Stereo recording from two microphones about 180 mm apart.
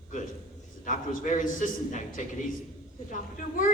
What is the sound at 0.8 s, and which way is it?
A man's voice, 45° left (ahead or behind).